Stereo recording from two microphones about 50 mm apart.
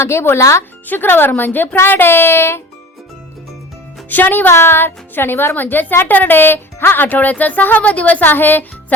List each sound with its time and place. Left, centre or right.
0.0 s speech: left
0.9 s speech: left
4.1 s speech: left
4.5 s speech: left